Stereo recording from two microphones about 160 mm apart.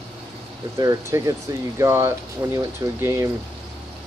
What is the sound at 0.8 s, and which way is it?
Speech, 20° right (ahead or behind).